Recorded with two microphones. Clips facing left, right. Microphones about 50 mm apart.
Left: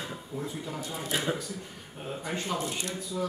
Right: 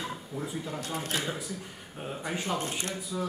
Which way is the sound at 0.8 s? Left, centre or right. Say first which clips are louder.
Left 1 dB; right.